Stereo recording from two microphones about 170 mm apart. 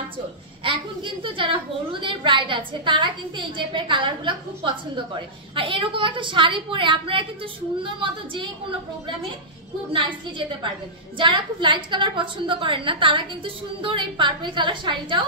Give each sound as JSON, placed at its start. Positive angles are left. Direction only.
{"t": 0.7, "sound": "a child's voice", "side_deg": -30}
{"t": 11.1, "sound": "a child's voice", "side_deg": -30}